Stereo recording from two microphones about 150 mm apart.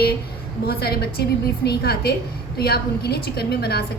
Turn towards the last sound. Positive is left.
turn(degrees=90)